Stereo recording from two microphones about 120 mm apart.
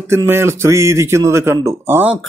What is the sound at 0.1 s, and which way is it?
Speech, 20° right (ahead or behind).